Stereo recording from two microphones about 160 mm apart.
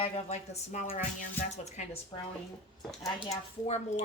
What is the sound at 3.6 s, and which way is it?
Speech, 45° left (ahead or behind).